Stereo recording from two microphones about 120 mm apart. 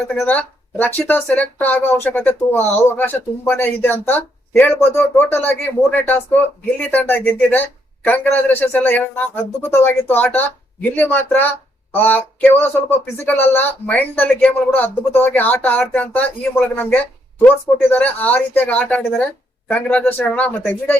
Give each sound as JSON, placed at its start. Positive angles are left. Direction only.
{"t": 0.2, "sound": "speech", "side_deg": 15}